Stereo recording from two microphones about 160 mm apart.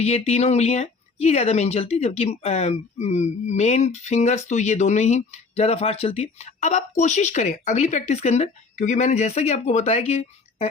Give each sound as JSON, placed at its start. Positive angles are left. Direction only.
{"t": 0.0, "sound": "speech", "side_deg": 40}